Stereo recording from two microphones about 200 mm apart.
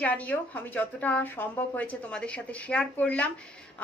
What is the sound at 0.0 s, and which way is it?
A woman's voice, 10° left (ahead or behind).